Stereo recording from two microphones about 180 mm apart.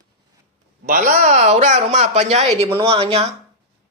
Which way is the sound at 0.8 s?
50° right (ahead or behind).